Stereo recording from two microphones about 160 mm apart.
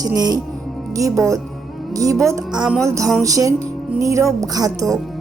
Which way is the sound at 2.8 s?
20° right (ahead or behind).